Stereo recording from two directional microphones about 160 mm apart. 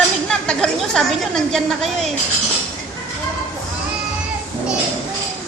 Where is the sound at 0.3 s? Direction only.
5° left (ahead or behind).